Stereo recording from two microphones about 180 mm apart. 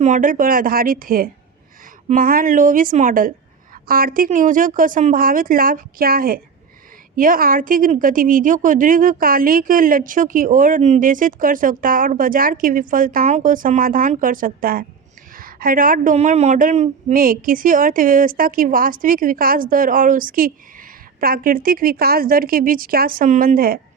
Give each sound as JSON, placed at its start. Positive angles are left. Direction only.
{"t": 0.0, "sound": "a woman's voice", "side_deg": -45}